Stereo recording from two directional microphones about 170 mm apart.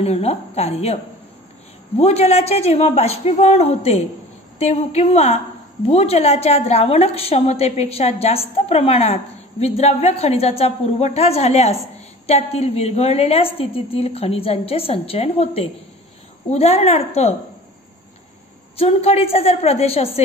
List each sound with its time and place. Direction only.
0.0 s a woman's voice: 35° left (ahead or behind)
2.0 s a woman's voice: 35° left (ahead or behind)
18.8 s a woman's voice: 35° left (ahead or behind)